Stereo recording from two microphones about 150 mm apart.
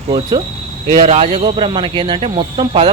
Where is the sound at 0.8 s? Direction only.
40° right (ahead or behind).